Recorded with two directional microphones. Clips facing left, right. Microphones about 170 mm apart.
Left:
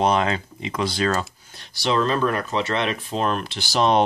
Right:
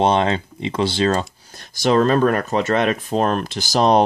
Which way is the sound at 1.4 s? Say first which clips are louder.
Right 6 dB; 45° right (ahead or behind).